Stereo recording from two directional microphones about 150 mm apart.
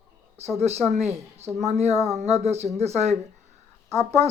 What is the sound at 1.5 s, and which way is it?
Speech, 45° right (ahead or behind).